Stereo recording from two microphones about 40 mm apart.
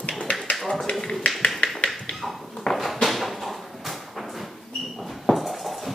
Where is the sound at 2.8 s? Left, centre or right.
Centre.